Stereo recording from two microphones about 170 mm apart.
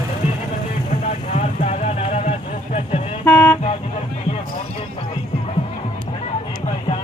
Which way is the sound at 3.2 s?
10° left (ahead or behind).